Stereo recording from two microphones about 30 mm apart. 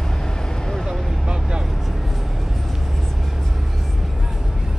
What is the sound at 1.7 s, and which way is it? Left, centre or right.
Music, centre.